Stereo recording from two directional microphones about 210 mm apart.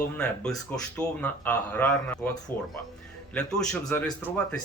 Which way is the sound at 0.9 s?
10° left (ahead or behind).